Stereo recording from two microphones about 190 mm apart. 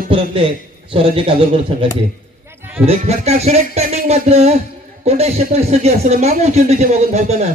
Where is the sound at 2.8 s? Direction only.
35° right (ahead or behind).